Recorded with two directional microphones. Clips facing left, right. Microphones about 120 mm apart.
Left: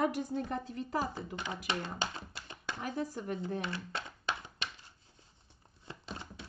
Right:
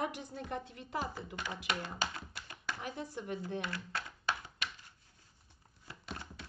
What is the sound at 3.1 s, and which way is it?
Speech, 40° left (ahead or behind).